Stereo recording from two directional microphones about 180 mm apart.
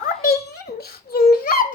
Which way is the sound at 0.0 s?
55° left (ahead or behind).